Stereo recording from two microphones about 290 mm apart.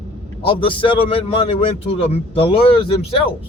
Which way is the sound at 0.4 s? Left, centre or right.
Centre.